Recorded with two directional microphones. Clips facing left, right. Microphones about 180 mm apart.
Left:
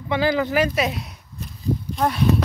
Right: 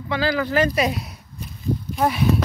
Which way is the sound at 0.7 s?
Centre (ahead or behind).